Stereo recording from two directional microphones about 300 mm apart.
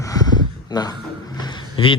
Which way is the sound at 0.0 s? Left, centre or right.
Centre.